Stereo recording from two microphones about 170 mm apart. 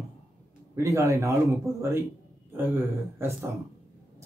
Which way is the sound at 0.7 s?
20° right (ahead or behind).